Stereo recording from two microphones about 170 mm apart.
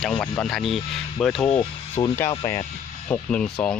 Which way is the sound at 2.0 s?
30° left (ahead or behind).